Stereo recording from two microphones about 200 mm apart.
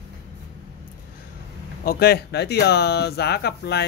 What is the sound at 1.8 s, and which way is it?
Speech, 50° left (ahead or behind).